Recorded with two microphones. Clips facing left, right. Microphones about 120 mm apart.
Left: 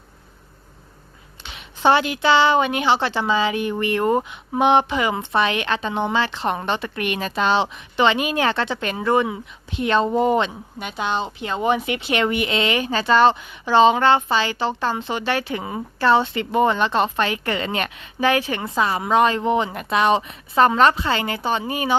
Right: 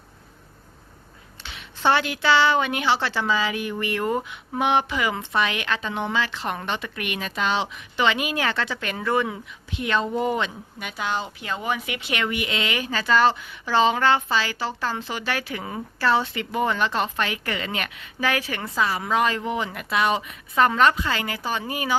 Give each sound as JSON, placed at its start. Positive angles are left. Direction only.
{"t": 1.5, "sound": "a woman's voice", "side_deg": 20}
{"t": 9.7, "sound": "a woman's voice", "side_deg": 30}
{"t": 15.6, "sound": "a woman's voice", "side_deg": 15}
{"t": 16.0, "sound": "a woman's voice", "side_deg": 25}